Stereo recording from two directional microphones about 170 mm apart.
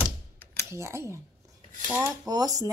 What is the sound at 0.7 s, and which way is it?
Speech, 15° right (ahead or behind).